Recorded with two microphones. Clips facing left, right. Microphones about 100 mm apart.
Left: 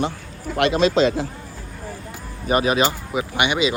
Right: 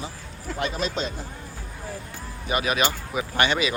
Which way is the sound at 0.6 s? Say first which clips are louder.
Left 11 dB; 90° left.